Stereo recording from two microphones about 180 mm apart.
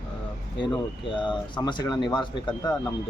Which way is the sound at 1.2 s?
25° left (ahead or behind).